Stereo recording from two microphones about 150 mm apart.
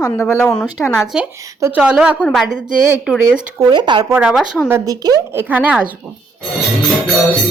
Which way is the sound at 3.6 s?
30° right (ahead or behind).